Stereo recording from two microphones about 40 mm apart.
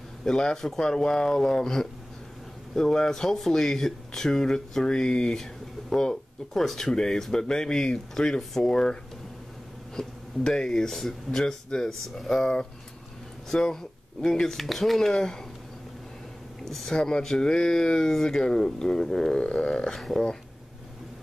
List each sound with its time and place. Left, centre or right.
0.2 s speech: centre
9.9 s speech: centre
14.4 s speech: centre
16.6 s speech: centre